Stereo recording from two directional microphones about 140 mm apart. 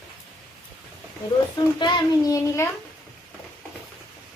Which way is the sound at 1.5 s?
30° left (ahead or behind).